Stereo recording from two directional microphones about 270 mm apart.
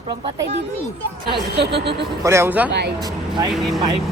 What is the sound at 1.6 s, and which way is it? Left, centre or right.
Speech, right.